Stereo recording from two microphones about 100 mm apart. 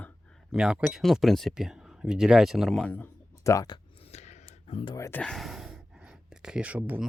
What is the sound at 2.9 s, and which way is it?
Speech, 20° left (ahead or behind).